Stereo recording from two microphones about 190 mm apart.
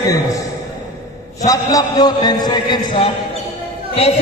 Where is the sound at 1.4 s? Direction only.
20° left (ahead or behind).